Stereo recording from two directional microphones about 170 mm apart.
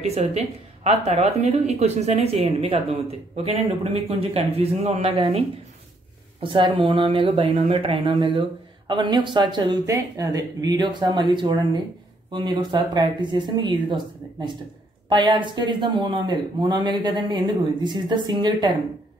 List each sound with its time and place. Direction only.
0.0 s a woman's voice: 40° right (ahead or behind)
6.4 s a woman's voice: 30° right (ahead or behind)